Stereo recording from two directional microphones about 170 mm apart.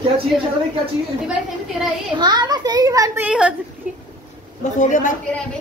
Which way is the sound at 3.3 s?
5° right (ahead or behind).